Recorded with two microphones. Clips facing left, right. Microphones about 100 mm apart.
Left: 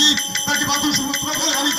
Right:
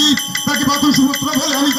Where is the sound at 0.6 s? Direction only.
55° right (ahead or behind).